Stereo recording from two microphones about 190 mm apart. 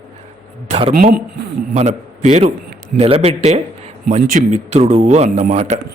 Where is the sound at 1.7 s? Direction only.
35° right (ahead or behind).